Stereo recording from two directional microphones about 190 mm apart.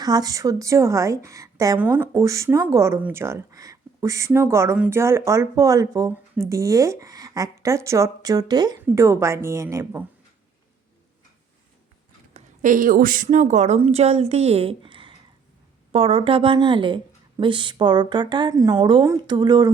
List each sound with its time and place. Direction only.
0.0 s a woman's voice: 20° right (ahead or behind)
12.3 s a woman's voice: 45° right (ahead or behind); by 19.7 s 20° right (ahead or behind)